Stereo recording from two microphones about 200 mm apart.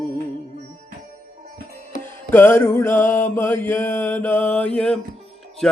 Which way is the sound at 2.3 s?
10° left (ahead or behind).